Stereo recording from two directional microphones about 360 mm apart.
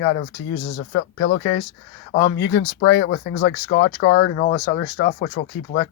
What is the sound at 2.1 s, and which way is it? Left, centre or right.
Speech, left.